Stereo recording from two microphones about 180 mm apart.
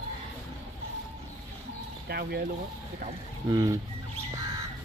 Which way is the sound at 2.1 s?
60° right (ahead or behind).